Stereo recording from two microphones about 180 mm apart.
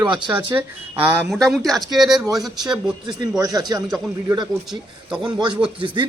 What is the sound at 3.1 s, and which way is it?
Speech, 20° right (ahead or behind).